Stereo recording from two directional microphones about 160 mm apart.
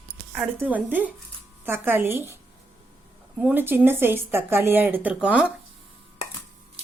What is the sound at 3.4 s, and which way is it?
Speech, 10° right (ahead or behind).